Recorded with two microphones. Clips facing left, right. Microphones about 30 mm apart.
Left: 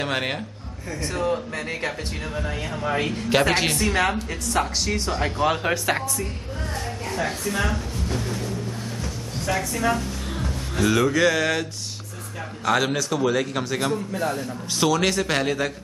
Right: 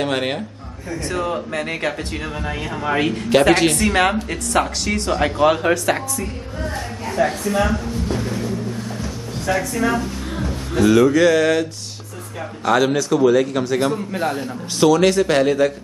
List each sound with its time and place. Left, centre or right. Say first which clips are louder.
0.0 s a man's voice: right 4 dB; centre
1.0 s speech: right 2 dB; right
3.5 s a man's voice: right 5 dB; centre
3.8 s a woman's voice: right 5 dB; centre
5.5 s a man's voice: right 5 dB; centre
9.5 s a woman's voice: right 4 dB; centre
9.9 s music: right 5 dB; centre
10.9 s a man's voice: right 6 dB; centre
12.6 s a man's voice: right 5 dB; centre
14.1 s a man's voice: right 4 dB; right
14.8 s a man's voice: right 7 dB; centre